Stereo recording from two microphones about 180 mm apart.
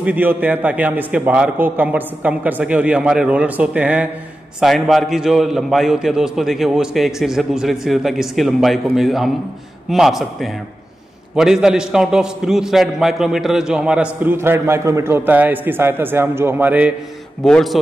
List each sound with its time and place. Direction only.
0.0 s a man's voice: 10° right (ahead or behind)
17.4 s a man's voice: 5° left (ahead or behind)